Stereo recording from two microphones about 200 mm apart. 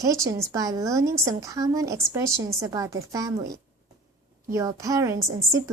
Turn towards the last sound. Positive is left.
turn(degrees=-15)  # may be behind; listen again after turning